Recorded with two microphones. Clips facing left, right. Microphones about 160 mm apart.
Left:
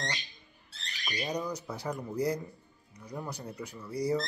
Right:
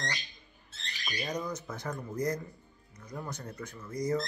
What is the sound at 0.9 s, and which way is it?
Squawk, centre (ahead or behind).